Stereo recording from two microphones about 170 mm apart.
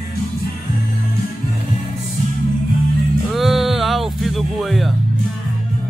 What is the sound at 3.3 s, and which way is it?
Speech, centre (ahead or behind).